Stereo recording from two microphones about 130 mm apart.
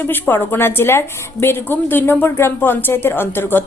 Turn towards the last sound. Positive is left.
turn(degrees=15)  # may be behind; listen again after turning